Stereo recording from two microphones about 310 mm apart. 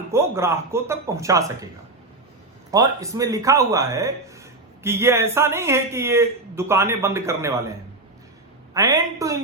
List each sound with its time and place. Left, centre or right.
0.1 s a man's voice: centre
2.7 s a man's voice: centre
8.7 s a man's voice: centre